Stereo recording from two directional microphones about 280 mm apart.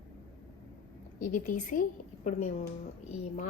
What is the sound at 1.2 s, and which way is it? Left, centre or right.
A woman's voice, left.